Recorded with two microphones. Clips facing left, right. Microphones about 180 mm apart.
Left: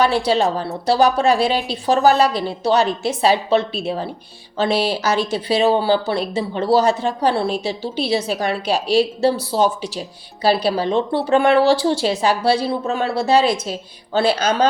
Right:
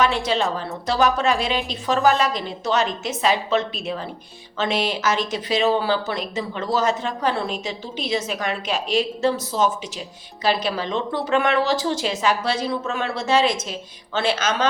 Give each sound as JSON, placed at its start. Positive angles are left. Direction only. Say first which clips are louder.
{"t": 0.0, "sound": "speech", "louder": "left 4 dB", "side_deg": 35}